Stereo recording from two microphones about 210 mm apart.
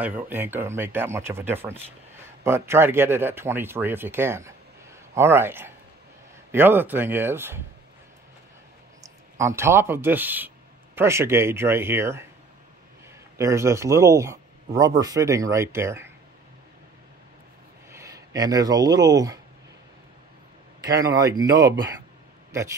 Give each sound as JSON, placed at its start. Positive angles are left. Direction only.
{"t": 0.0, "sound": "speech", "side_deg": -10}
{"t": 9.0, "sound": "speech", "side_deg": -15}
{"t": 13.4, "sound": "speech", "side_deg": -15}
{"t": 17.9, "sound": "speech", "side_deg": -15}
{"t": 20.8, "sound": "speech", "side_deg": -15}